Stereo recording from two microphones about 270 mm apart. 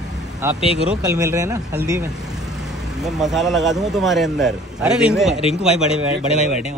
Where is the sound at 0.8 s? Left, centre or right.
Centre.